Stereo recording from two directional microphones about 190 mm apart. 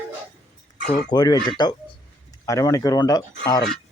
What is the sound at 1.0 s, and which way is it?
Speech, 20° left (ahead or behind).